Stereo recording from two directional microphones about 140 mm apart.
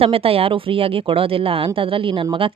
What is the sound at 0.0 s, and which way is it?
Speech, 45° right (ahead or behind).